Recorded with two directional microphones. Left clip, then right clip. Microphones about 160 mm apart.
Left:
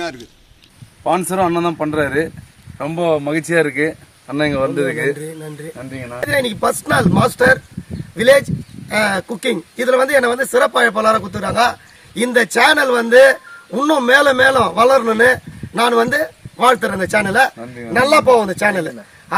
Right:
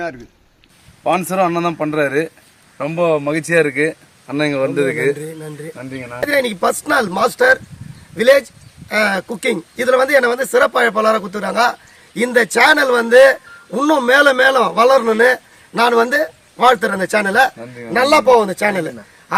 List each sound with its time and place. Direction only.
1.3 s a man's voice: 20° right (ahead or behind)
5.1 s a man's voice: centre (ahead or behind)
17.6 s a man's voice: 35° right (ahead or behind)
17.9 s a man's voice: centre (ahead or behind)